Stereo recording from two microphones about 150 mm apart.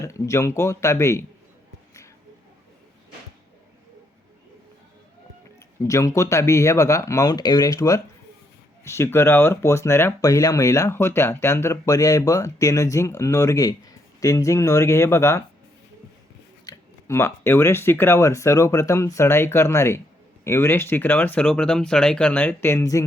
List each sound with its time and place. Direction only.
0.0 s speech: 20° left (ahead or behind)
5.8 s speech: 20° left (ahead or behind)
16.6 s speech: 20° left (ahead or behind)